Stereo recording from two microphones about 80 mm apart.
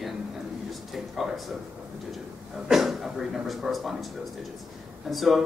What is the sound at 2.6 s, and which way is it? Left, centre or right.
A woman's voice, centre.